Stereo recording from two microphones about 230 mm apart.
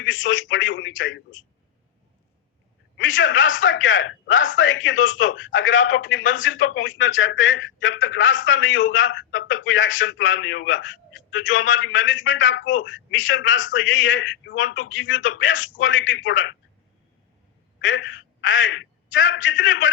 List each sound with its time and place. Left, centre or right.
0.0 s a man's voice: left
3.0 s a man's voice: left
17.7 s a woman's voice: left